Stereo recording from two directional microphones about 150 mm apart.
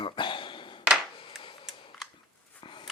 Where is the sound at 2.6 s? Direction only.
35° left (ahead or behind).